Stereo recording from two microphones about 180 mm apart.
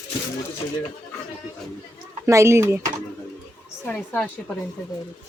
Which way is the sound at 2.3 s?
15° right (ahead or behind).